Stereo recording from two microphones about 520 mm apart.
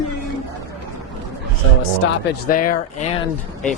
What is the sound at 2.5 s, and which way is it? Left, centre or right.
Speech, centre.